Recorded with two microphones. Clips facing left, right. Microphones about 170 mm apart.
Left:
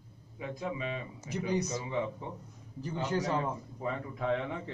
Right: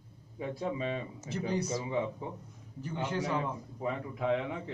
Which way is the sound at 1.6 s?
30° right (ahead or behind).